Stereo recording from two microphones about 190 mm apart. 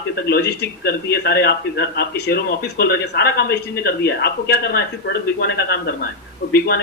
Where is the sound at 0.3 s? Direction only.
55° left (ahead or behind).